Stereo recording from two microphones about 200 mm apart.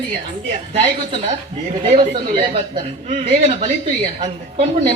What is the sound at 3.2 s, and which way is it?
Speech, 35° right (ahead or behind).